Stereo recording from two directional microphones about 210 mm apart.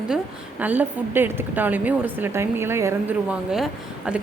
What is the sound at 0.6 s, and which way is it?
A woman's voice, 10° right (ahead or behind).